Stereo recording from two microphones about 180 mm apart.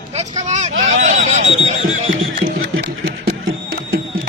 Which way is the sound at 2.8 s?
60° right (ahead or behind).